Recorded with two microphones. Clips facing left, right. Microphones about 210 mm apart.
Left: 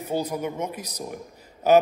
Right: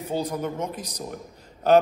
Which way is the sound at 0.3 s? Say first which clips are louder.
Even; 10° left (ahead or behind).